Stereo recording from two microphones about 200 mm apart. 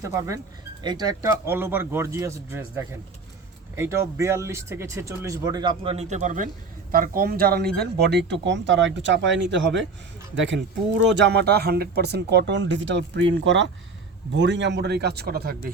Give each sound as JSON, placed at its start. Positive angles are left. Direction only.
{"t": 0.0, "sound": "speech", "side_deg": -15}